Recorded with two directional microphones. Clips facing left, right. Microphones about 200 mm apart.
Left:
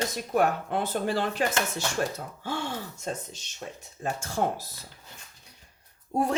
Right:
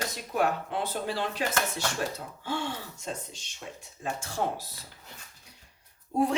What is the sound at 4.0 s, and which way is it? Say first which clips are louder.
Speech: left 3 dB; 45° left (ahead or behind).